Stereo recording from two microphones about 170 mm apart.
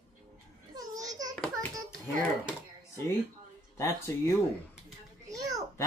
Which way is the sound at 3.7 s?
15° left (ahead or behind).